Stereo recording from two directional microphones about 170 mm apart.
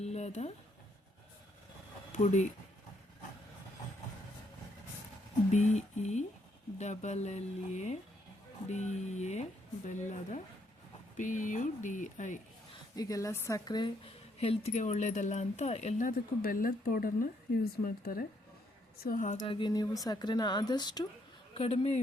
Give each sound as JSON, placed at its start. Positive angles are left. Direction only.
{"t": 0.0, "sound": "a sound", "side_deg": 40}
{"t": 2.1, "sound": "a woman's voice", "side_deg": 45}
{"t": 5.5, "sound": "a woman's voice", "side_deg": 40}
{"t": 13.0, "sound": "a woman's voice", "side_deg": 20}
{"t": 19.0, "sound": "a woman's voice", "side_deg": 50}
{"t": 19.5, "sound": "speech", "side_deg": 25}
{"t": 21.5, "sound": "speech", "side_deg": 35}